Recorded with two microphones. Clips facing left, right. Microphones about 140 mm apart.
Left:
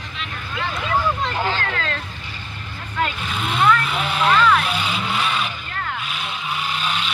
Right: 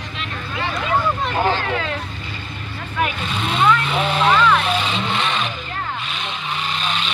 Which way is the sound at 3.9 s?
35° right (ahead or behind).